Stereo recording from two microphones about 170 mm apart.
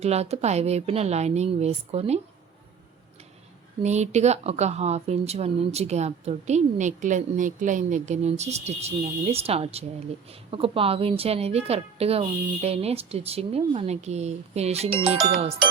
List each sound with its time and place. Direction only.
0.0 s speech: 40° right (ahead or behind)
3.8 s speech: 40° right (ahead or behind)